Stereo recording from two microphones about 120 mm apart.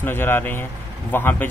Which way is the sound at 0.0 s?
20° left (ahead or behind).